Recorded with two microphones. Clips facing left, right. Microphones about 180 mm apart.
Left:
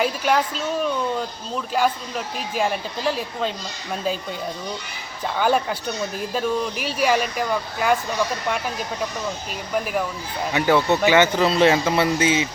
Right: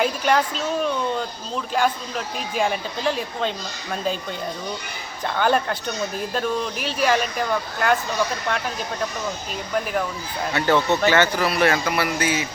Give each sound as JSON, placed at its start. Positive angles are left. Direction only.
{"t": 0.0, "sound": "speech", "side_deg": 5}
{"t": 5.2, "sound": "speech", "side_deg": 5}
{"t": 10.5, "sound": "speech", "side_deg": 15}